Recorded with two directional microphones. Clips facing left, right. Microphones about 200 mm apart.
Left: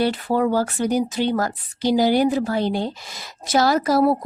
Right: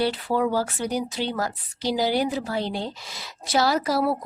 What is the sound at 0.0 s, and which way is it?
A woman's voice, 50° left (ahead or behind).